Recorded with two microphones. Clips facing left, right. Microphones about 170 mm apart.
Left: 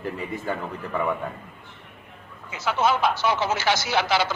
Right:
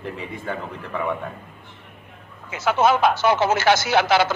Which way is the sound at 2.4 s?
50° right (ahead or behind).